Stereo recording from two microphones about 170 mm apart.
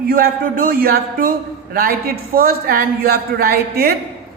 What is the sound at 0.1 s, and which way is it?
A man's voice, 55° right (ahead or behind).